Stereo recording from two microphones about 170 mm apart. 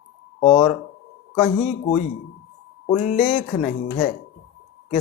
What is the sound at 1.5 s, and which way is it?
Speech, 40° left (ahead or behind).